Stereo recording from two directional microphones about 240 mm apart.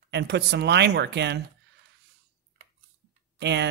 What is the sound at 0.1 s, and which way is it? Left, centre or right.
Speech, right.